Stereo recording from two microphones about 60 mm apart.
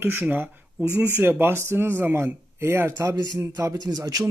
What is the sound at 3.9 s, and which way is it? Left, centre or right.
Speech, right.